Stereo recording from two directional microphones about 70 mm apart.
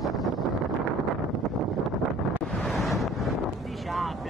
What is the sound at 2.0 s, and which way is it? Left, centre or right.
Wind noise, centre.